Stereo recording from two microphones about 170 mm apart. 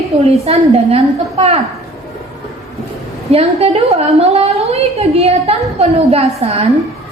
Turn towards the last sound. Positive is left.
turn(degrees=-35)  # may be behind; listen again after turning